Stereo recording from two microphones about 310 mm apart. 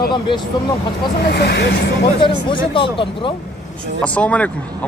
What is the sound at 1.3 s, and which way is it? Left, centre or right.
Speech, left.